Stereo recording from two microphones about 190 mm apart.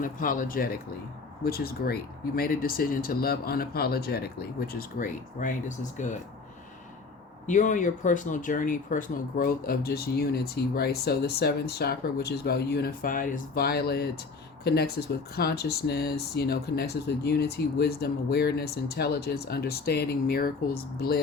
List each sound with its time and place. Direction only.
0.0 s speech: 45° left (ahead or behind)
7.4 s speech: 40° left (ahead or behind)